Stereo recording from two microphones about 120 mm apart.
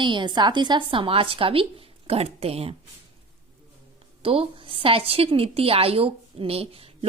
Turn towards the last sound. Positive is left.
turn(degrees=-55)  # may be behind; listen again after turning